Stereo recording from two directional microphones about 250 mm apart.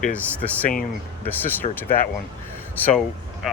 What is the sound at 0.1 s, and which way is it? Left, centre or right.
Speech, centre.